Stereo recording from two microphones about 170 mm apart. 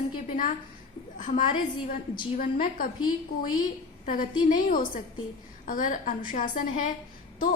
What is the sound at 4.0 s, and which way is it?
A woman's voice, 50° left (ahead or behind).